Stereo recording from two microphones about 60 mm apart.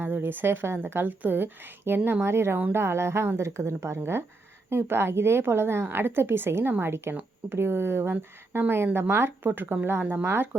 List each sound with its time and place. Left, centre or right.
0.0 s a woman's voice: right